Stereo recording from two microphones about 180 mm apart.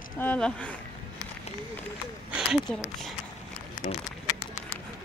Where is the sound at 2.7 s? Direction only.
5° left (ahead or behind).